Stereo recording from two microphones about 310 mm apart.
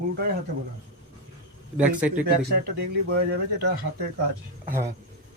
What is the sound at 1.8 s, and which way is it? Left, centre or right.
Speech, centre.